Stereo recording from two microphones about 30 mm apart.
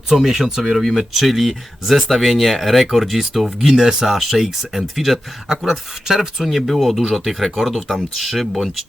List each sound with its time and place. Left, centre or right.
0.3 s speech: centre
0.8 s speech: centre
5.5 s speech: centre